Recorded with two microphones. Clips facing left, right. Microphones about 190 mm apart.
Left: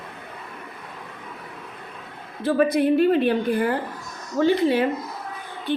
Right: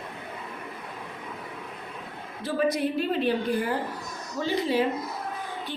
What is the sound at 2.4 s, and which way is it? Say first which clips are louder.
A woman's voice: left 6 dB; 60° left (ahead or behind).